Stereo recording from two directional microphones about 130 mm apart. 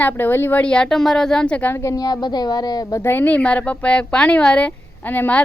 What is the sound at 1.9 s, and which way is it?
Speech, 30° left (ahead or behind).